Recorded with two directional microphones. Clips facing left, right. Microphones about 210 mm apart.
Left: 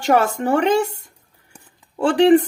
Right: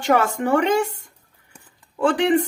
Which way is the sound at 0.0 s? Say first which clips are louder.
Left 2 dB; 35° left (ahead or behind).